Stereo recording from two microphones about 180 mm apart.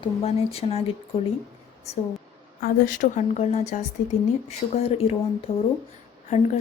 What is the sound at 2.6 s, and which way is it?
Speech, 45° left (ahead or behind).